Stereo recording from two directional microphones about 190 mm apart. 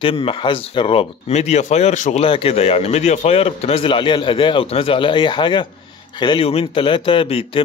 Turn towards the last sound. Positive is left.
turn(degrees=30)  # may be behind; listen again after turning